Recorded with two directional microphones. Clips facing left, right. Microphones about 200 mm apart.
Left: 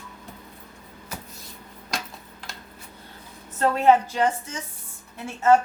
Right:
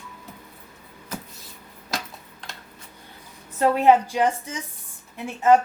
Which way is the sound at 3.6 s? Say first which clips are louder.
Right 1 dB; 15° right (ahead or behind).